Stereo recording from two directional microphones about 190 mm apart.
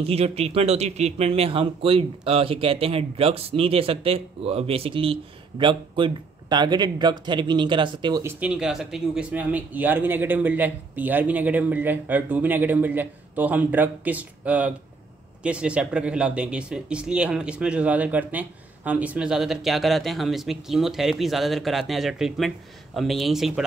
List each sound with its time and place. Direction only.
0.0 s a man's voice: 30° right (ahead or behind); by 23.6 s centre (ahead or behind)